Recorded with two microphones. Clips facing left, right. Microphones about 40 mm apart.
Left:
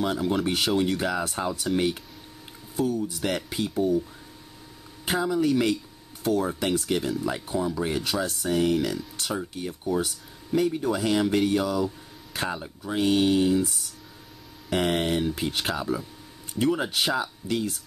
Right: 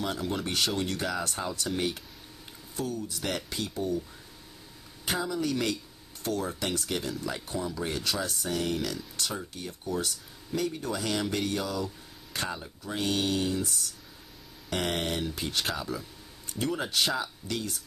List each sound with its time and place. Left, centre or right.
0.0 s speech: centre
5.0 s speech: centre